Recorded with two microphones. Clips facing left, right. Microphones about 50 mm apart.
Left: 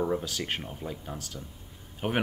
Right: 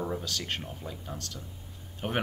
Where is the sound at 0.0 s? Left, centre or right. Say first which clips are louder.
Left 4 dB; centre.